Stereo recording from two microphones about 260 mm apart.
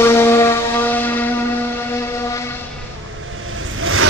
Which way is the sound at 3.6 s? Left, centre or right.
Right.